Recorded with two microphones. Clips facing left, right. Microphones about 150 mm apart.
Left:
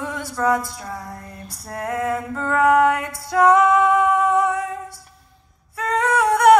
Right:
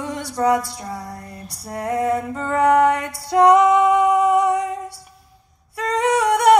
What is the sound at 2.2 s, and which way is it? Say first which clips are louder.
Mantra: even; 30° right (ahead or behind).